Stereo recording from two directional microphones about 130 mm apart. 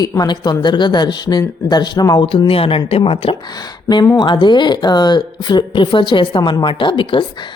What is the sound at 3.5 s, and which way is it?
A woman's voice, 30° left (ahead or behind).